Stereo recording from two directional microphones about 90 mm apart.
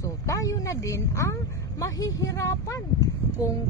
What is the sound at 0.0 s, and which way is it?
Speech, 40° left (ahead or behind).